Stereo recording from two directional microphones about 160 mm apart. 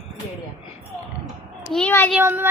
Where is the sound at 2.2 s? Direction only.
15° right (ahead or behind).